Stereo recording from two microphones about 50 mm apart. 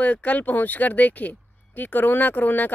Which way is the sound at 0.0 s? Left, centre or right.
Left.